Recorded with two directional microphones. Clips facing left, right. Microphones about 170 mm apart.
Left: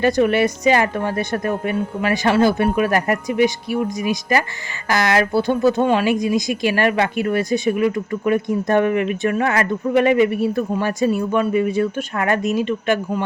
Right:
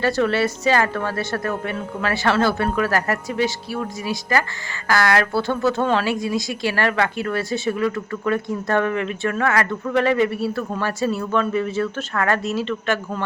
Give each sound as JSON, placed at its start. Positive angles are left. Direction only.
{"t": 0.0, "sound": "speech", "side_deg": 15}